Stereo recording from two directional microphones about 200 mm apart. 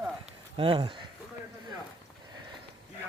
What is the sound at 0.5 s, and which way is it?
Speech, 25° right (ahead or behind).